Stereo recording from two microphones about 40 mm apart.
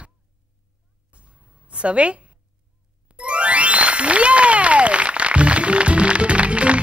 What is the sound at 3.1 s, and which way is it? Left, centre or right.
Ding, right.